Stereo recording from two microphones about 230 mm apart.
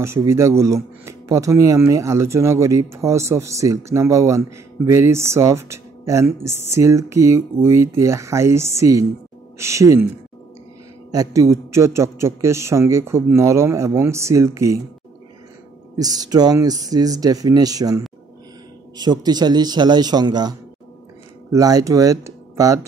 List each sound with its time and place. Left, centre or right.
0.0 s speech: centre
11.1 s speech: centre
16.0 s speech: centre